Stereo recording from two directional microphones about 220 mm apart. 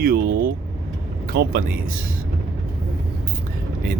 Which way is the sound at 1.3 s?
45° right (ahead or behind).